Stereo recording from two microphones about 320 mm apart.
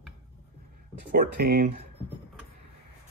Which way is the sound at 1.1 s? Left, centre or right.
Right.